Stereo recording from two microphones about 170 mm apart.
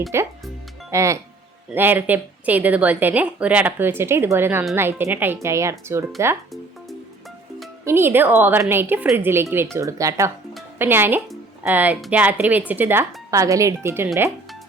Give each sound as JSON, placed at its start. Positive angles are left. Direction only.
{"t": 0.1, "sound": "a woman's voice", "side_deg": -15}
{"t": 7.9, "sound": "a woman's voice", "side_deg": -15}